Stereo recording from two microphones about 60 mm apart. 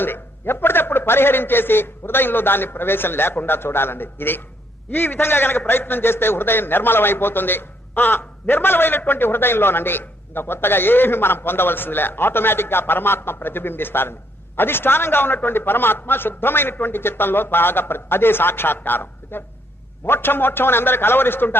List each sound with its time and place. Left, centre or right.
0.0 s a man's voice: left